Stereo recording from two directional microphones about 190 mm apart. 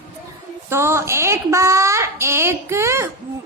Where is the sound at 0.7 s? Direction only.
15° right (ahead or behind).